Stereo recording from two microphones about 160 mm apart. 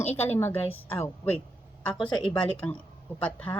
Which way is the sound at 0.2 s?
10° left (ahead or behind).